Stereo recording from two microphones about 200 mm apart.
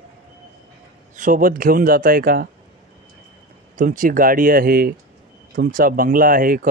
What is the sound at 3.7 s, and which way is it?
Speech, 40° right (ahead or behind).